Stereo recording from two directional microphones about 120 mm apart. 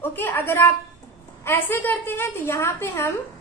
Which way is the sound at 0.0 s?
15° left (ahead or behind).